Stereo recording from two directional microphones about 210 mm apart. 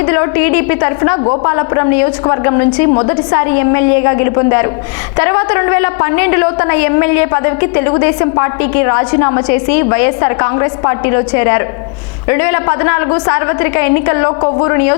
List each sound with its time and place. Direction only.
0.0 s a woman's voice: 15° left (ahead or behind)
3.3 s a woman's voice: 15° left (ahead or behind)